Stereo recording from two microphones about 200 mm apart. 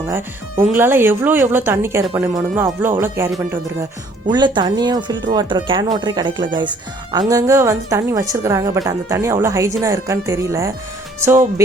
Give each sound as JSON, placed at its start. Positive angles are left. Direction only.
{"t": 0.1, "sound": "speech", "side_deg": -10}
{"t": 4.3, "sound": "speech", "side_deg": -20}